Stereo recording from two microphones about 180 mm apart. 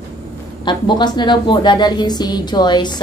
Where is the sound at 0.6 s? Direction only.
25° left (ahead or behind).